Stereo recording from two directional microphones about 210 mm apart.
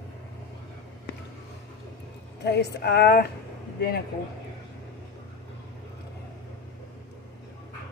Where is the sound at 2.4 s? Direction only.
50° left (ahead or behind).